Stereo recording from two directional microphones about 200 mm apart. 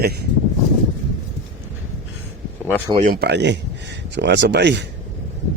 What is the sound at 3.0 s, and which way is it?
Speech, 50° right (ahead or behind).